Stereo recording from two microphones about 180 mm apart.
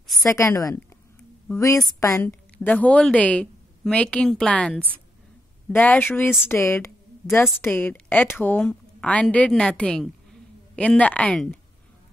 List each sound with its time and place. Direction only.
0.2 s a woman's voice: 15° left (ahead or behind)